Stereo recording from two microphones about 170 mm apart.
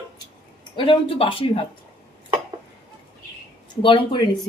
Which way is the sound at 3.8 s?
30° left (ahead or behind).